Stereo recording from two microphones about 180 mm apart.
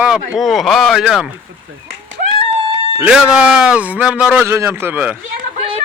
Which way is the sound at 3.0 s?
5° right (ahead or behind).